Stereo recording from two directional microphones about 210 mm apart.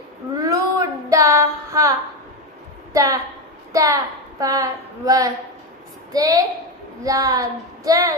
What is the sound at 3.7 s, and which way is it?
Speech, 15° right (ahead or behind).